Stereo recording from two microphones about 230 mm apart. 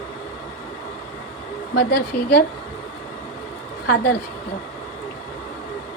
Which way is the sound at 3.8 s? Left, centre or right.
Left.